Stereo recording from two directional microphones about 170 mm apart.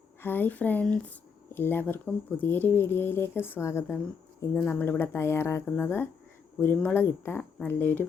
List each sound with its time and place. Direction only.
0.2 s speech: 10° left (ahead or behind)